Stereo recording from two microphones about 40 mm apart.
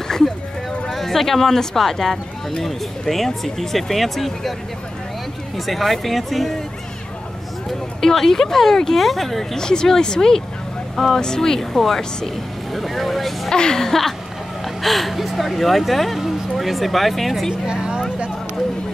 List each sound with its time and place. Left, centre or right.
0.9 s speech: centre
5.7 s speech: centre
8.0 s speech: centre
13.5 s speech: centre